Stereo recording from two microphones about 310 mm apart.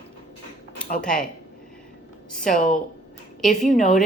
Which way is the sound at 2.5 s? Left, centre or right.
Left.